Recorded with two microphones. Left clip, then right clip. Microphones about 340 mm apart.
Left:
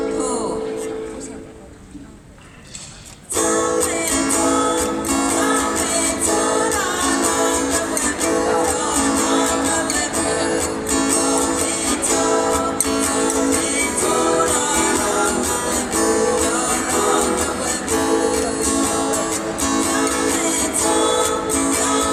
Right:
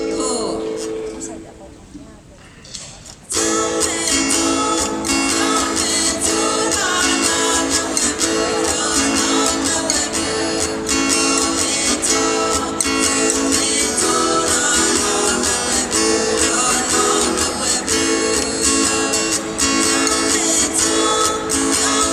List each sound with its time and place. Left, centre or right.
3.3 s music: centre